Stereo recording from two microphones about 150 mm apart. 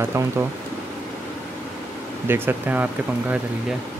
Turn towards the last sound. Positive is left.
turn(degrees=-10)  # may be behind; listen again after turning